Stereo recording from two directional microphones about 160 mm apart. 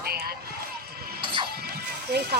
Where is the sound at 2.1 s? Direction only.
80° right.